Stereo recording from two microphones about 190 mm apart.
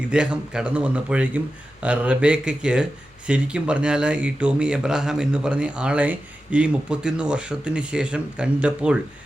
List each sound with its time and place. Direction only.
0.1 s speech: 5° right (ahead or behind)